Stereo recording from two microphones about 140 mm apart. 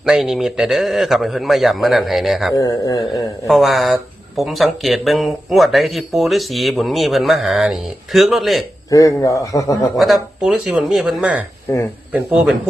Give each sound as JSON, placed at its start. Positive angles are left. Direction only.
{"t": 0.0, "sound": "speech", "side_deg": -5}
{"t": 2.5, "sound": "a man's voice", "side_deg": 25}
{"t": 3.4, "sound": "speech", "side_deg": 0}
{"t": 8.9, "sound": "a man's voice", "side_deg": 25}
{"t": 10.0, "sound": "speech", "side_deg": 0}